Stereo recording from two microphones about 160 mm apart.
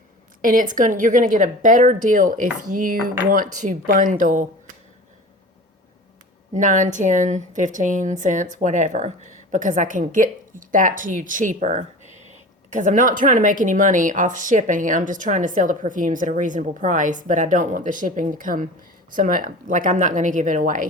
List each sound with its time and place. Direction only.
0.4 s speech: 55° right (ahead or behind)
6.5 s a woman's voice: 50° right (ahead or behind)